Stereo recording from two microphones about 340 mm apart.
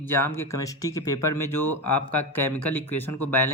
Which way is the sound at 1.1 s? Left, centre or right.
Left.